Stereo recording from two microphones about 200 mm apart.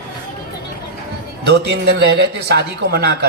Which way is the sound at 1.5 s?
55° right (ahead or behind).